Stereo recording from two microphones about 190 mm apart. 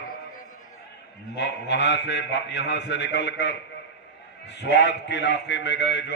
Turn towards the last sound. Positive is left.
turn(degrees=65)  # may be behind; listen again after turning